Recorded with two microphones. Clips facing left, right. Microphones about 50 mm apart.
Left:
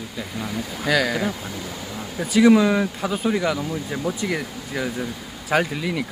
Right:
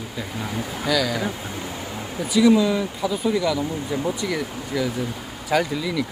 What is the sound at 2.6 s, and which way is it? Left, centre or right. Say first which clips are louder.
Speech: left 1 dB; left.